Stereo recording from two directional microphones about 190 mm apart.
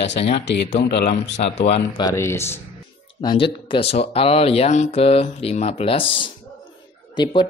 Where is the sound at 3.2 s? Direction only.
25° left (ahead or behind).